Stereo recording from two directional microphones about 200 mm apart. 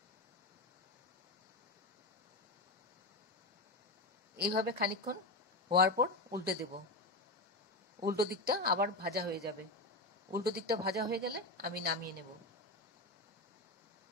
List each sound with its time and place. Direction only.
4.4 s a woman's voice: 55° right (ahead or behind)
8.2 s a woman's voice: 50° right (ahead or behind)